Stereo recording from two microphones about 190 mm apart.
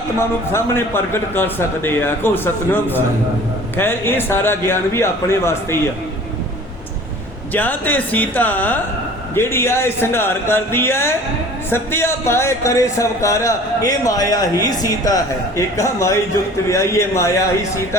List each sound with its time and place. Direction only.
0.2 s speech: 15° left (ahead or behind)
7.5 s speech: 10° left (ahead or behind)